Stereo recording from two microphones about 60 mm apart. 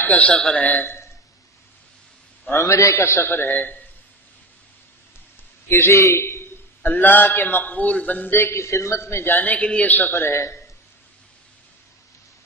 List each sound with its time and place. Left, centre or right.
0.0 s a man's voice: left
2.5 s a man's voice: left
3.5 s a man's voice: left
5.7 s a man's voice: left
6.8 s a man's voice: left
8.3 s a man's voice: left
8.5 s a man's voice: left
9.3 s a man's voice: left
10.2 s a man's voice: left